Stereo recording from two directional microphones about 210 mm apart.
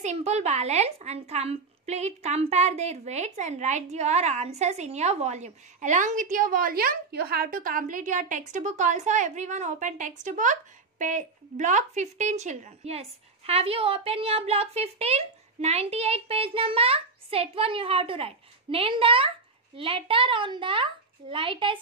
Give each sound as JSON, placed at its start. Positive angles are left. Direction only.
{"t": 0.0, "sound": "a woman's voice", "side_deg": -30}